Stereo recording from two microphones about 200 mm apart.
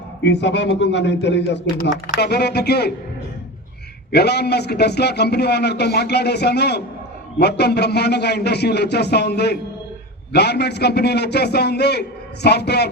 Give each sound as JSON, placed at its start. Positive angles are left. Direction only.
{"t": 0.2, "sound": "a man's voice", "side_deg": 60}
{"t": 4.1, "sound": "a man's voice", "side_deg": 55}